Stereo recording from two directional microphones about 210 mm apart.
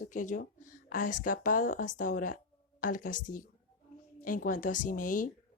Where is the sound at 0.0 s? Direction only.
40° left (ahead or behind).